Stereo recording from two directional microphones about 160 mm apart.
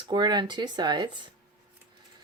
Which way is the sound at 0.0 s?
25° right (ahead or behind).